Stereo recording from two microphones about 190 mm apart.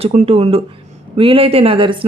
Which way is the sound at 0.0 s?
35° right (ahead or behind).